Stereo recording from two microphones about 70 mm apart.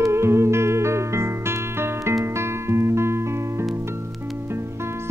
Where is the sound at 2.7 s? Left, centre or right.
Right.